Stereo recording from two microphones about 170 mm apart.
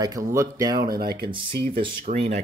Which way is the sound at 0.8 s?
65° right (ahead or behind).